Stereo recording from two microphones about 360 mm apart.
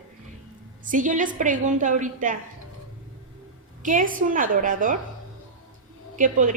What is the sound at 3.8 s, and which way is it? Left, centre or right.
A woman's voice, right.